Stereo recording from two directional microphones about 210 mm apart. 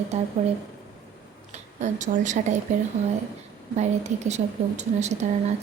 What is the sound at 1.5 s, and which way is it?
Speech, 35° right (ahead or behind).